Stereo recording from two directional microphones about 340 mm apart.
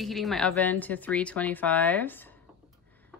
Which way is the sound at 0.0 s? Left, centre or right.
Centre.